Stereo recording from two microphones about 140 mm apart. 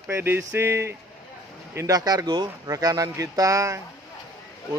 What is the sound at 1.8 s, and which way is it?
Speech, 30° right (ahead or behind).